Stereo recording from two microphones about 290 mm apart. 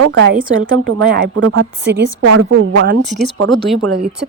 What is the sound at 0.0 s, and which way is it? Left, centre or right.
A woman's voice, right.